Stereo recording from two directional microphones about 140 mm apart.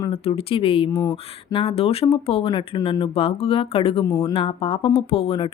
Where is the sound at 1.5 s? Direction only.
40° left (ahead or behind).